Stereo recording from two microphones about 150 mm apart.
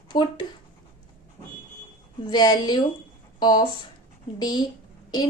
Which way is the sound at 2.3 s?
30° left (ahead or behind).